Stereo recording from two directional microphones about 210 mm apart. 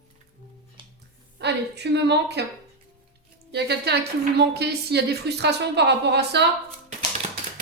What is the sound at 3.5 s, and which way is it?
A woman's voice, 50° right (ahead or behind).